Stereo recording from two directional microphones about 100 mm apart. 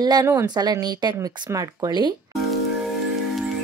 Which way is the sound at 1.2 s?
35° right (ahead or behind).